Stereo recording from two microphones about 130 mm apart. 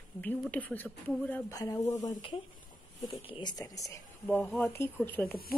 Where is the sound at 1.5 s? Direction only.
25° left (ahead or behind).